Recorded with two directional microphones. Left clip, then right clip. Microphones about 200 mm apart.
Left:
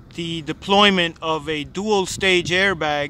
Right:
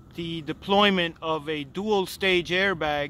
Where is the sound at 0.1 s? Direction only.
Centre (ahead or behind).